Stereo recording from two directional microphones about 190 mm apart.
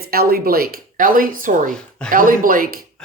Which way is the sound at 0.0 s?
55° right (ahead or behind).